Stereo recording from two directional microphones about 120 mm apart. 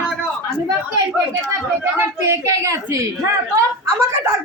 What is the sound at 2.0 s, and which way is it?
A child's voice, 25° right (ahead or behind).